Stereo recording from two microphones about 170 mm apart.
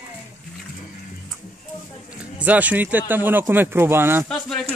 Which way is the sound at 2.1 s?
10° right (ahead or behind).